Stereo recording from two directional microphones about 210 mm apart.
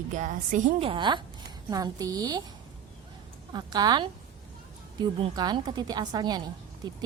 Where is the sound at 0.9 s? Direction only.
20° right (ahead or behind).